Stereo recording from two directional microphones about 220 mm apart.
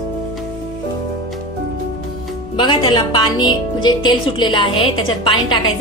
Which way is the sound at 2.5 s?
20° left (ahead or behind).